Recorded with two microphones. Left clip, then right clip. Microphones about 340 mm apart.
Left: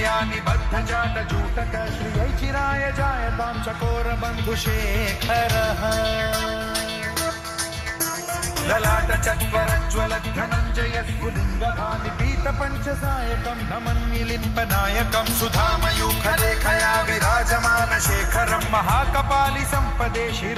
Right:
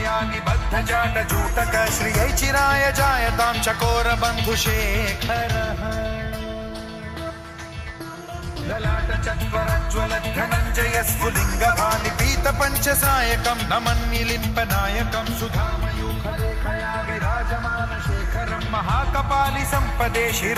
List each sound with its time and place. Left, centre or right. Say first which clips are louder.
0.0 s music: left 1 dB; centre
0.7 s music: right 5 dB; centre
1.5 s music: right 10 dB; right
2.1 s music: right 5 dB; right
3.7 s music: right 6 dB; right; by 6.1 s centre
8.7 s music: left 6 dB; left
9.5 s music: left 2 dB; centre
10.5 s music: right 4 dB; right
11.6 s music: right 6 dB; right
13.1 s music: right 7 dB; right
14.3 s music: even; centre
16.0 s music: left 8 dB; left
18.3 s music: left 5 dB; left; by 20.1 s centre
20.1 s music: right 4 dB; centre